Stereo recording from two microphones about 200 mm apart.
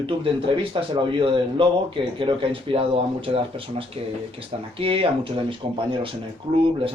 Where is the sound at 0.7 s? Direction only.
25° right (ahead or behind).